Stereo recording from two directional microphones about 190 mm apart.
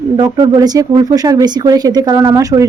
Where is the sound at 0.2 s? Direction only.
20° right (ahead or behind).